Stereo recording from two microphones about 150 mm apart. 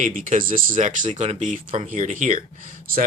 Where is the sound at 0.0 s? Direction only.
60° right (ahead or behind).